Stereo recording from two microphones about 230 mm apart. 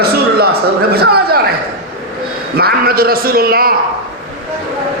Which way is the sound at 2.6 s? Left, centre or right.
Right.